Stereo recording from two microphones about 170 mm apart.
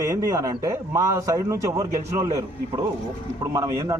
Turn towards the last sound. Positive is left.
turn(degrees=-20)  # may be behind; listen again after turning